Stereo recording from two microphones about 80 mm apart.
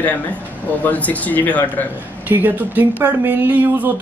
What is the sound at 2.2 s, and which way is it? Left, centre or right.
Speech, right.